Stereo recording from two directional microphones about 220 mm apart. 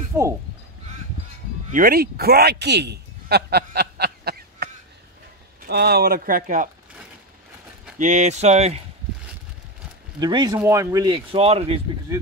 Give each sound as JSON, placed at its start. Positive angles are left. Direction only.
{"t": 0.1, "sound": "speech", "side_deg": -10}
{"t": 1.7, "sound": "speech", "side_deg": -40}
{"t": 5.7, "sound": "speech", "side_deg": -45}
{"t": 8.0, "sound": "speech", "side_deg": -35}
{"t": 10.2, "sound": "speech", "side_deg": -20}